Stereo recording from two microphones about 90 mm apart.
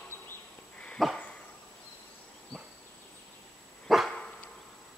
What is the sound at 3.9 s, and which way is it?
Dog, centre (ahead or behind).